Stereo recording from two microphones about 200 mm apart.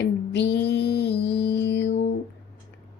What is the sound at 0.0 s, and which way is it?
Music, 55° left (ahead or behind).